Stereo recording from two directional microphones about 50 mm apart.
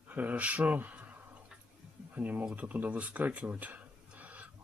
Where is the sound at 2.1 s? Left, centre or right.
Right.